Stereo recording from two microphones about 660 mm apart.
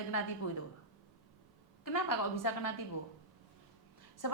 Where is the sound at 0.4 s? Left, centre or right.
Left.